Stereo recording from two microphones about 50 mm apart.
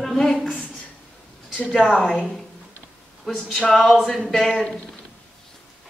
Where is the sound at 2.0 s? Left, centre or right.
Centre.